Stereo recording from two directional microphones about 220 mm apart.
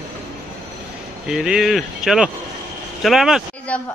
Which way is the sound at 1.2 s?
Centre (ahead or behind).